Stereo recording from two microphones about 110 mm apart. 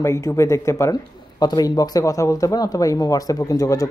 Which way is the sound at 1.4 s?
40° left (ahead or behind).